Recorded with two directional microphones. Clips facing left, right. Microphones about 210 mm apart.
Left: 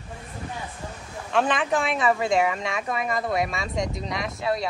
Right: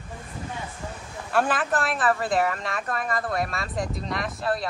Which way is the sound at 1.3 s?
5° right (ahead or behind).